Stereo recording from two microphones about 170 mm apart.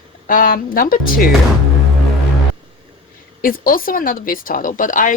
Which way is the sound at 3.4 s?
55° left (ahead or behind).